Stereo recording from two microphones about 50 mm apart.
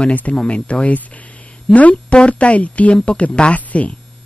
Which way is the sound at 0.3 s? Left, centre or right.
Left.